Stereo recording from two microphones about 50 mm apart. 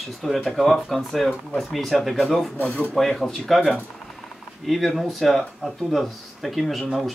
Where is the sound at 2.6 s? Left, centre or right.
Left.